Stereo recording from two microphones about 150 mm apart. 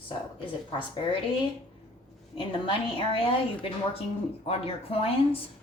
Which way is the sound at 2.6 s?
35° left (ahead or behind).